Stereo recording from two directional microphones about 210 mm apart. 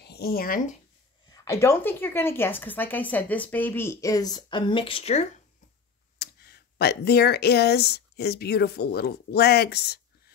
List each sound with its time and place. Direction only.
0.0 s speech: 50° left (ahead or behind)
1.3 s speech: 15° left (ahead or behind); by 5.3 s 30° left (ahead or behind)
6.1 s speech: 50° left (ahead or behind)